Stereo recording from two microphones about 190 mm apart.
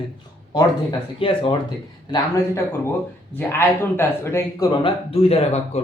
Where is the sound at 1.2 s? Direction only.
25° left (ahead or behind).